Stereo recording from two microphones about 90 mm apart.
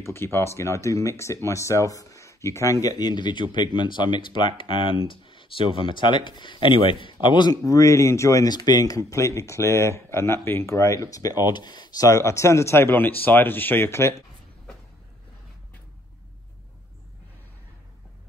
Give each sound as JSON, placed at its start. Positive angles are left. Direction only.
{"t": 0.0, "sound": "speech", "side_deg": 25}
{"t": 7.6, "sound": "speech", "side_deg": 35}
{"t": 8.5, "sound": "speech", "side_deg": 50}